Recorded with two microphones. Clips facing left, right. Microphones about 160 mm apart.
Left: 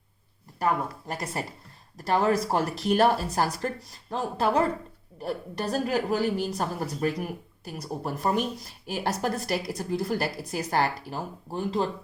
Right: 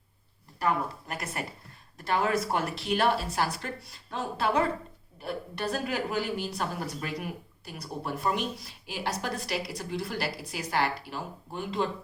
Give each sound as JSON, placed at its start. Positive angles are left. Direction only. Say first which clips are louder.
{"t": 0.6, "sound": "a woman's voice", "louder": "left 2 dB", "side_deg": 35}